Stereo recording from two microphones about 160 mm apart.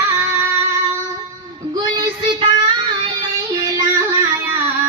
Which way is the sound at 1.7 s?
25° right (ahead or behind).